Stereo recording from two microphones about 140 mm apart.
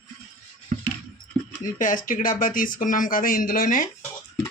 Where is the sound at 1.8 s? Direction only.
75° left (ahead or behind).